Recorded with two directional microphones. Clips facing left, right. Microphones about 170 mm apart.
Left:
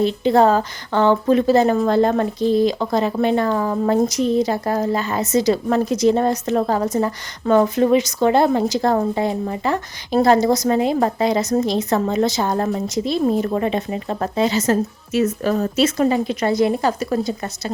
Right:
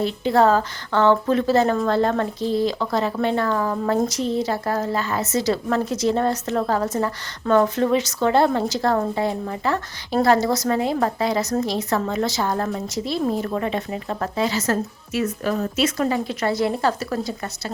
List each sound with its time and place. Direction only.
0.0 s a woman's voice: 20° left (ahead or behind)
15.5 s speech: 35° left (ahead or behind)
16.0 s speech: 20° left (ahead or behind)